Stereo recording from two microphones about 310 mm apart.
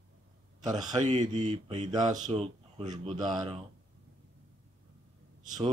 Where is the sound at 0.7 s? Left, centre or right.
Centre.